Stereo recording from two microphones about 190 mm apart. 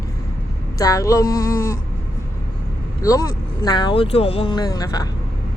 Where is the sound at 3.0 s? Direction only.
20° left (ahead or behind).